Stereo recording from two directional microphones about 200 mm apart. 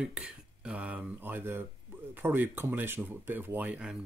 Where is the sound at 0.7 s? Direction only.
5° right (ahead or behind).